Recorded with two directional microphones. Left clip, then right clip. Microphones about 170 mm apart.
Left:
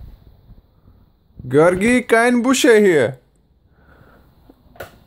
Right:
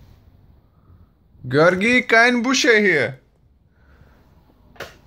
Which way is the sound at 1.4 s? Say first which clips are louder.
Left 2 dB; 25° left (ahead or behind).